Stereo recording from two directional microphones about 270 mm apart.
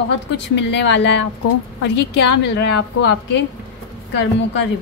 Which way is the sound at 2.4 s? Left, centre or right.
Left.